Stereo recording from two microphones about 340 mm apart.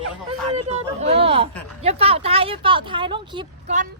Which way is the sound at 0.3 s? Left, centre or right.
Centre.